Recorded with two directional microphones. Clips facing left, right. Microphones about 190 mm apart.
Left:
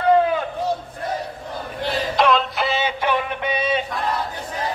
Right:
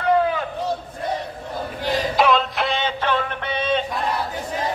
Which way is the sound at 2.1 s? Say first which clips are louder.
Left 1 dB; centre (ahead or behind).